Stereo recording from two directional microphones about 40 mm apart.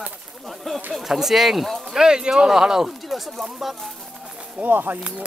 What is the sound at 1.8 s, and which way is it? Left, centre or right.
Speech, centre.